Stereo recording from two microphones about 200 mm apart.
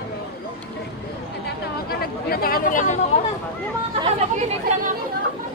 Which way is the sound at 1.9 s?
50° left (ahead or behind).